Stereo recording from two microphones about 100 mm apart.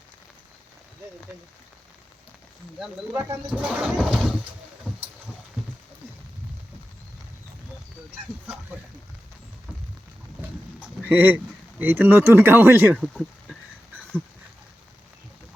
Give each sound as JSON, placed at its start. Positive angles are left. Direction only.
{"t": 3.5, "sound": "a sound", "side_deg": -10}
{"t": 11.0, "sound": "speech", "side_deg": -20}
{"t": 13.0, "sound": "speech", "side_deg": -5}